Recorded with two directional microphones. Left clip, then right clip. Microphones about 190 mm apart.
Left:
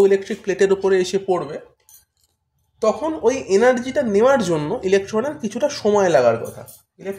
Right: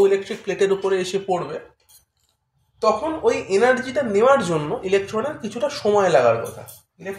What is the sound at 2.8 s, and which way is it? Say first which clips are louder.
Speech: left 1 dB; 60° left (ahead or behind).